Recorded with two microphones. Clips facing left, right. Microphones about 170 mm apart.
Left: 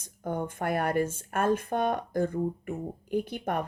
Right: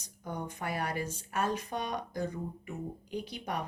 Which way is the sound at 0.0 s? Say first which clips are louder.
Left 7 dB; 50° left (ahead or behind).